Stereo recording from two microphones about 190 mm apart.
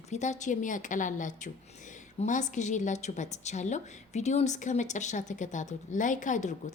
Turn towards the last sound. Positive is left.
turn(degrees=40)  # may be behind; listen again after turning